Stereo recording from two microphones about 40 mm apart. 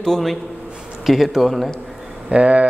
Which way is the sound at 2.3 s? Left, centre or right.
Right.